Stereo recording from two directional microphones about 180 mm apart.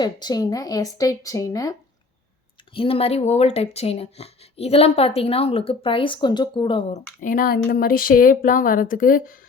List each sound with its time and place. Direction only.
0.0 s speech: 25° left (ahead or behind)
2.7 s speech: 30° left (ahead or behind)
7.2 s speech: 50° left (ahead or behind)